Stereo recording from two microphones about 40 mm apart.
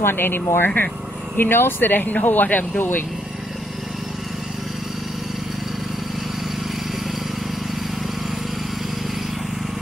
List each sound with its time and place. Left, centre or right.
0.0 s speech: left